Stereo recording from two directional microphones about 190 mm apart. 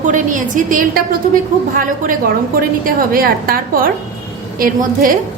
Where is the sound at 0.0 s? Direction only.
40° right (ahead or behind).